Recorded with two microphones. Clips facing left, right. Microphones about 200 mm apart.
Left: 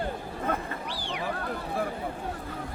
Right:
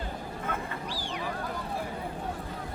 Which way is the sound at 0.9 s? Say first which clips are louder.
Left 1 dB; 65° left (ahead or behind).